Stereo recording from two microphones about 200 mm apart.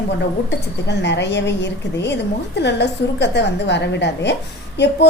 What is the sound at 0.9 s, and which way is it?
A woman's voice, 60° left (ahead or behind).